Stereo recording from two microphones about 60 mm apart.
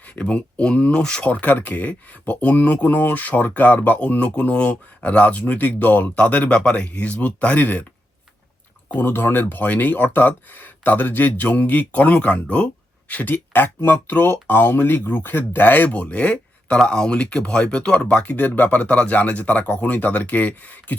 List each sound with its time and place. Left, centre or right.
0.2 s speech: centre
8.9 s speech: left